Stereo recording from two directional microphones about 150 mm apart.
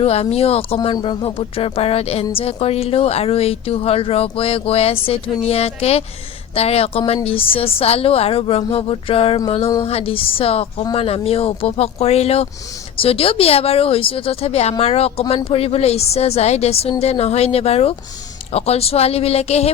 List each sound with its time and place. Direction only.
0.0 s a woman's voice: 45° left (ahead or behind)